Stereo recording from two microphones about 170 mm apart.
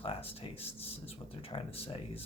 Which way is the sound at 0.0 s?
35° left (ahead or behind).